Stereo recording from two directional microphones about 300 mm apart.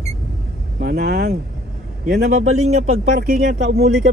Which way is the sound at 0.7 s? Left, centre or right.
Right.